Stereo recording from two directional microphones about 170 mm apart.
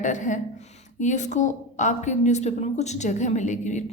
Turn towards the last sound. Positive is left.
turn(degrees=45)  # may be behind; listen again after turning